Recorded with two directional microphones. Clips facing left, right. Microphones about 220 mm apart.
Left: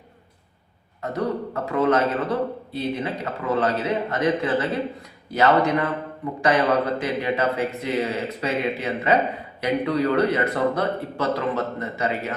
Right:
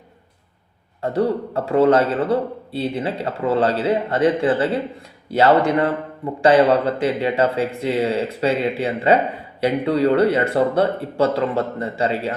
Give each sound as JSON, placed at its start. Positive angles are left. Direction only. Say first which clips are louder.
{"t": 1.0, "sound": "a man's voice", "louder": "right 5 dB", "side_deg": -30}